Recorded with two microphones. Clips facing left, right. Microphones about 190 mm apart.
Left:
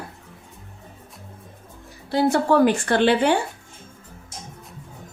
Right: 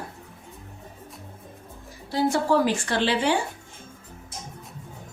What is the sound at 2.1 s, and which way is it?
A woman's voice, 60° left (ahead or behind).